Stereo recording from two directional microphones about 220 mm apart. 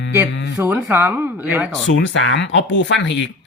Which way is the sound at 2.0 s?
55° left (ahead or behind).